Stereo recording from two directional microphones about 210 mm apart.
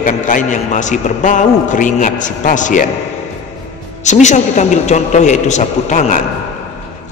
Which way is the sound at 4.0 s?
35° left (ahead or behind).